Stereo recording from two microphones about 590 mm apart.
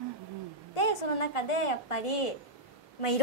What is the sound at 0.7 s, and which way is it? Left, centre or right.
A woman's voice, left.